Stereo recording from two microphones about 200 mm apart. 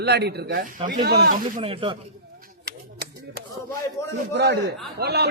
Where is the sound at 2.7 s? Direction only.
50° right (ahead or behind).